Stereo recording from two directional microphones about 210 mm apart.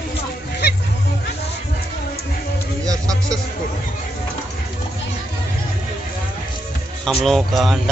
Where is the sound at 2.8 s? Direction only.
15° right (ahead or behind).